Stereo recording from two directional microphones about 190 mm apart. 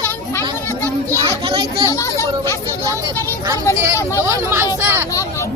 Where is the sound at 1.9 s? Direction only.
15° left (ahead or behind).